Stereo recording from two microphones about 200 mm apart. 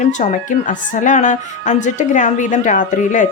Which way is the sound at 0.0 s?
35° left (ahead or behind).